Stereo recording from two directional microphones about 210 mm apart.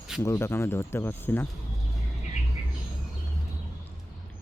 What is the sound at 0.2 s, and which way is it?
Speech, 10° left (ahead or behind).